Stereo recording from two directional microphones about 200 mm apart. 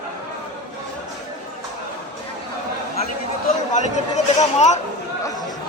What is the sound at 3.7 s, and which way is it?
Speech, 35° left (ahead or behind).